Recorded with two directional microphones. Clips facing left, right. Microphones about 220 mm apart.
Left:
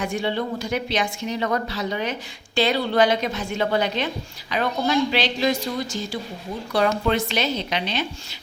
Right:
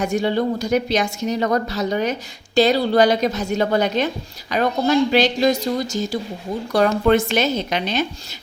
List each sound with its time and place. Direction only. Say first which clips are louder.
0.0 s a woman's voice: right 5 dB; 40° right (ahead or behind)